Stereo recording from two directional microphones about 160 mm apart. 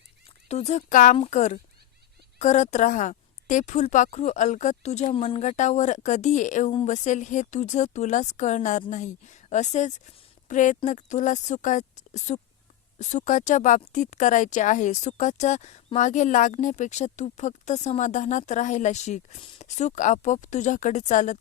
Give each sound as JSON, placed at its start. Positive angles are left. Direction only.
{"t": 0.4, "sound": "speech", "side_deg": 45}